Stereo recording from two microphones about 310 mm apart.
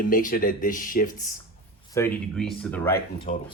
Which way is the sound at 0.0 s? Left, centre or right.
Left.